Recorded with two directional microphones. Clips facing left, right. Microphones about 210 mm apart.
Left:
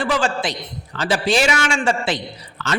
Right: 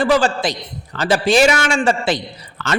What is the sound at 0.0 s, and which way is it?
A man's voice, 40° right (ahead or behind).